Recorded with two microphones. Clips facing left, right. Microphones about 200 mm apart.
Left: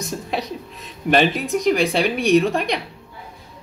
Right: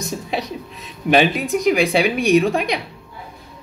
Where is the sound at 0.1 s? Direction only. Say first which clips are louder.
Even; centre (ahead or behind).